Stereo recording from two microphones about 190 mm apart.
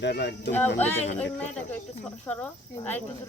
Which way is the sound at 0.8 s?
10° left (ahead or behind).